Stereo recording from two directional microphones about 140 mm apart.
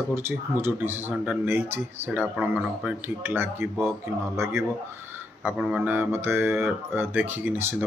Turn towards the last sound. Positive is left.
turn(degrees=-15)  # may be behind; listen again after turning